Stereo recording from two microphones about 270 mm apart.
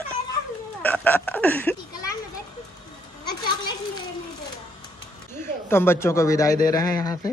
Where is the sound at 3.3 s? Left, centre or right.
Centre.